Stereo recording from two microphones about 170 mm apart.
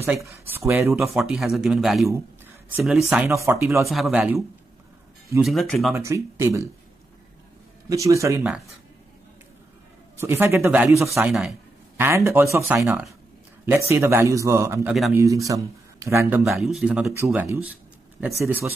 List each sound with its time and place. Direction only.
0.0 s speech: 15° right (ahead or behind)
0.9 s speech: centre (ahead or behind)
3.3 s speech: 15° right (ahead or behind)
3.8 s speech: centre (ahead or behind)
5.4 s speech: centre (ahead or behind)
5.9 s speech: 15° right (ahead or behind)
7.9 s speech: 20° right (ahead or behind)
10.2 s speech: 15° right (ahead or behind)
11.2 s speech: centre (ahead or behind)
12.0 s speech: 15° right (ahead or behind)
14.9 s speech: centre (ahead or behind)
15.1 s speech: 20° right (ahead or behind)
16.4 s speech: centre (ahead or behind)